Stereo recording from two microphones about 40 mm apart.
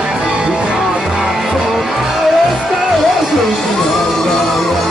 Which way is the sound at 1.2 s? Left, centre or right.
Centre.